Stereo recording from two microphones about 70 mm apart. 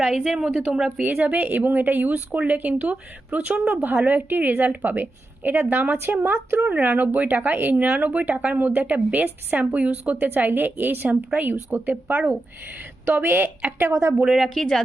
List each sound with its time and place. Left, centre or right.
0.3 s a woman's voice: centre
1.2 s speech: right
13.9 s a woman's voice: right
14.3 s a woman's voice: centre